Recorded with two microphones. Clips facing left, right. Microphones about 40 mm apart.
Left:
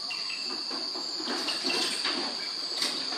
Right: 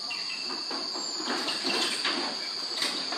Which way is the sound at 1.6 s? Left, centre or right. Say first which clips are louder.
Right 1 dB; right.